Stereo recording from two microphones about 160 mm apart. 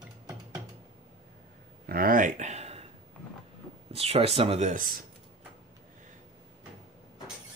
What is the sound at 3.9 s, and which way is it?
Speech, 40° right (ahead or behind).